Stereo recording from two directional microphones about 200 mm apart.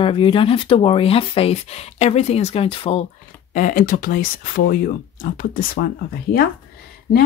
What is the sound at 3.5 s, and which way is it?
Speech, 40° left (ahead or behind).